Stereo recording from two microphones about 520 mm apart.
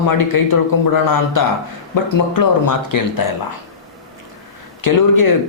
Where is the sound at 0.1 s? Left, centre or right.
Left.